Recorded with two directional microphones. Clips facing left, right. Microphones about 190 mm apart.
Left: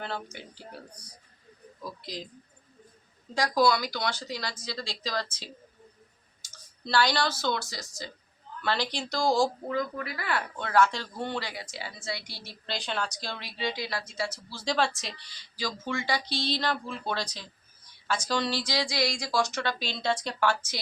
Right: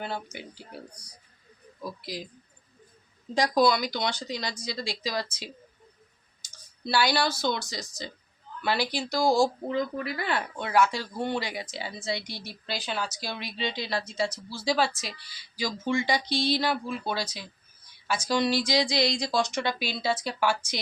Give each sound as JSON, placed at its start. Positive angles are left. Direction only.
{"t": 0.0, "sound": "a woman's voice", "side_deg": -15}
{"t": 1.8, "sound": "a woman's voice", "side_deg": -5}
{"t": 3.3, "sound": "a woman's voice", "side_deg": -20}
{"t": 9.6, "sound": "speech", "side_deg": -25}
{"t": 10.7, "sound": "a woman's voice", "side_deg": -10}
{"t": 14.5, "sound": "a woman's voice", "side_deg": -5}